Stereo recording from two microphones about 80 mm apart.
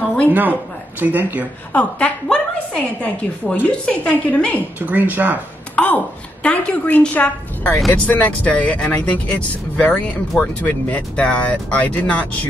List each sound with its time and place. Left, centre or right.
0.3 s speech: right
1.7 s speech: centre
4.7 s speech: right
5.8 s a sound: centre
6.4 s speech: centre